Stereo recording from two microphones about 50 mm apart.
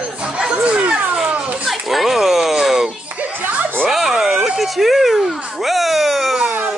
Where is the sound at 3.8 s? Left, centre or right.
Centre.